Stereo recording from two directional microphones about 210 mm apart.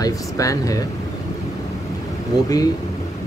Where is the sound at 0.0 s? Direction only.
15° left (ahead or behind).